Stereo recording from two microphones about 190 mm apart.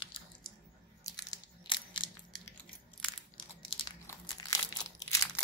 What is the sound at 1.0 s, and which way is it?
Crunch, 20° left (ahead or behind).